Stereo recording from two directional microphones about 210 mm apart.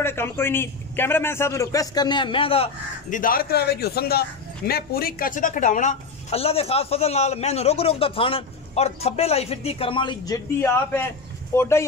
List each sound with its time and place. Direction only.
0.0 s a man's voice: 10° left (ahead or behind); by 3.2 s 25° left (ahead or behind)
3.2 s a man's voice: 45° left (ahead or behind); by 11.8 s 10° left (ahead or behind)